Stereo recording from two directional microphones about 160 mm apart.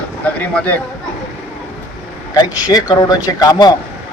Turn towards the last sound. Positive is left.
turn(degrees=25)  # may be behind; listen again after turning